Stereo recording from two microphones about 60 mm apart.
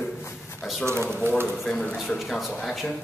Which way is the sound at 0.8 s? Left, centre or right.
Right.